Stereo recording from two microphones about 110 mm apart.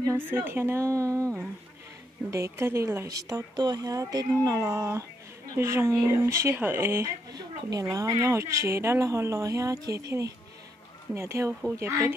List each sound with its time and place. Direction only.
0.3 s a woman's voice: 20° right (ahead or behind)
2.3 s a woman's voice: 25° right (ahead or behind)
7.3 s a woman's voice: 35° right (ahead or behind)